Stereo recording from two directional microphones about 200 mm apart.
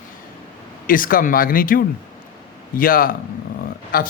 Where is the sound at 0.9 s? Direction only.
45° left (ahead or behind).